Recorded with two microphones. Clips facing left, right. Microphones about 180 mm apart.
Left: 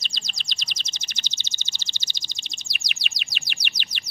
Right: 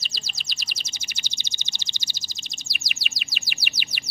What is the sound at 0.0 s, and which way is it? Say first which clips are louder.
Bird: left 1 dB; 5° right (ahead or behind).